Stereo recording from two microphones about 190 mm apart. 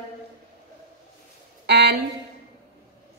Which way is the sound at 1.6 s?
60° right (ahead or behind).